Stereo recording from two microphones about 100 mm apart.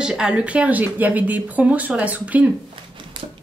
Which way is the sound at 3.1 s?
50° right (ahead or behind).